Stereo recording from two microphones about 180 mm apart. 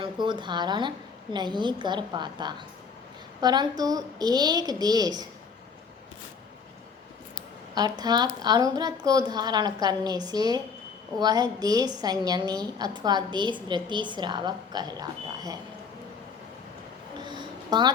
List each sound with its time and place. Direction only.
0.0 s a woman's voice: 25° right (ahead or behind)
7.8 s a woman's voice: 20° right (ahead or behind)
17.2 s a sound: 25° right (ahead or behind)